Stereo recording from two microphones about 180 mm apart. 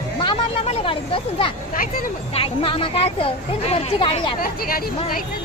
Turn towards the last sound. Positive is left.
turn(degrees=55)  # may be behind; listen again after turning